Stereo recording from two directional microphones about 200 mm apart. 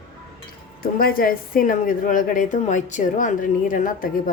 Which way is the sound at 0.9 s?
45° left (ahead or behind).